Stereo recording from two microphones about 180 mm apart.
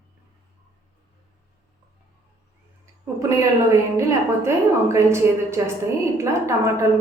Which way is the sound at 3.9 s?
15° right (ahead or behind).